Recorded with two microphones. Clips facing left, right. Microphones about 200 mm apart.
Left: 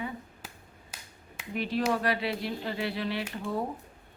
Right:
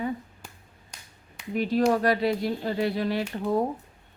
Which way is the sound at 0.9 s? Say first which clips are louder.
Left 1 dB; 5° left (ahead or behind).